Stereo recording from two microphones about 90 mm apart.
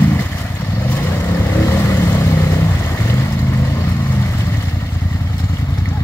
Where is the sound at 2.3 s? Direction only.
25° left (ahead or behind).